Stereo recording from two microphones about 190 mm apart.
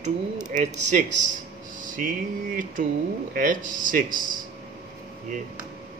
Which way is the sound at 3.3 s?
45° right (ahead or behind).